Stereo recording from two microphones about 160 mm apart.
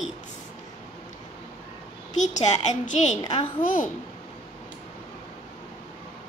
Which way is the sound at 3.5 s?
55° left (ahead or behind).